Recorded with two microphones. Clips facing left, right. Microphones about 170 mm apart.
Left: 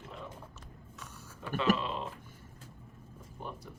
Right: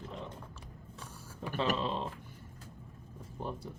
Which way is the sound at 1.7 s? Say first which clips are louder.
Even; 30° right (ahead or behind).